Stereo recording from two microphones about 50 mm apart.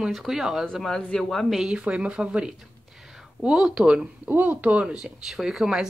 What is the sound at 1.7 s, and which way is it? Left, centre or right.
Speech, right.